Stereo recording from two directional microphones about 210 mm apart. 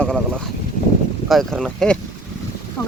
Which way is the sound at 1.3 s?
Centre (ahead or behind).